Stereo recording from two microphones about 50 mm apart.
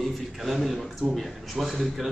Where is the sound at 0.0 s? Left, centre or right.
Centre.